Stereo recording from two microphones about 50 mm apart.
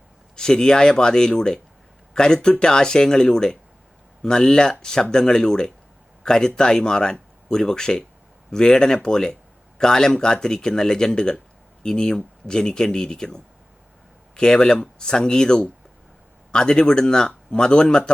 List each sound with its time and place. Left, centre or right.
0.3 s speech: centre